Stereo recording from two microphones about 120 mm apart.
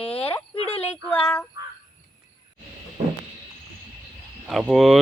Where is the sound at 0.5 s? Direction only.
55° left (ahead or behind).